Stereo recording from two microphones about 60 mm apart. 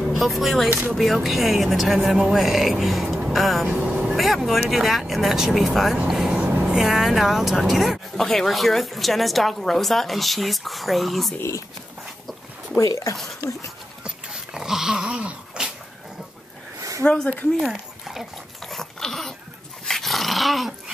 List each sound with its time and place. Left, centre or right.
0.2 s speech: centre
3.6 s speech: right
4.2 s speech: centre
6.2 s vehicle: right
6.8 s speech: centre
12.7 s speech: left
13.4 s speech: left
14.0 s dog: centre
15.0 s a sound: centre
17.0 s speech: centre
17.6 s dog: centre